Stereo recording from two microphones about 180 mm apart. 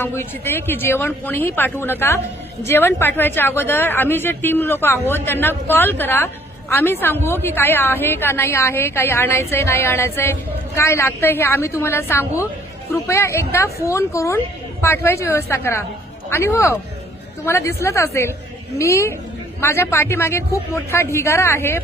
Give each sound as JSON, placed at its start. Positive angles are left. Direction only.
{"t": 0.0, "sound": "speech", "side_deg": 10}